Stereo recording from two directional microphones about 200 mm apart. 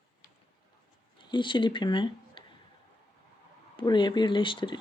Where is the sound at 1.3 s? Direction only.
25° left (ahead or behind).